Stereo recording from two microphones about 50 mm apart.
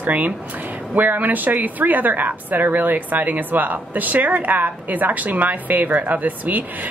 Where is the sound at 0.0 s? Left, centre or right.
Right.